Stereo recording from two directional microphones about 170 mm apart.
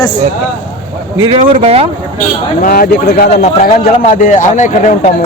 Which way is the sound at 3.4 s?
45° left (ahead or behind).